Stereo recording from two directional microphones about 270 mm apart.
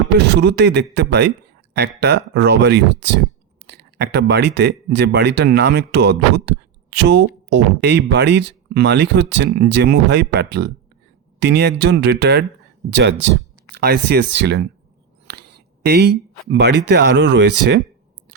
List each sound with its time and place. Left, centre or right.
0.2 s speech: right
15.3 s a sound: right
16.9 s speech: right